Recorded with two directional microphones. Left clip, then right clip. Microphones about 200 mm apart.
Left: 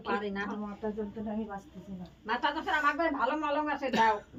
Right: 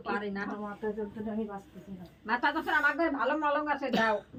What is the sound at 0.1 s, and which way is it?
Speech, 5° left (ahead or behind).